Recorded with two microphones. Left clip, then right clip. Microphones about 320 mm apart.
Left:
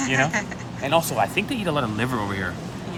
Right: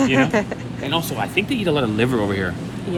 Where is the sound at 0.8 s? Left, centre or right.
Centre.